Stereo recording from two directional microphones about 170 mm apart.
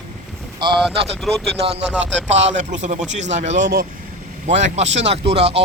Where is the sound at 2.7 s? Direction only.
45° right (ahead or behind).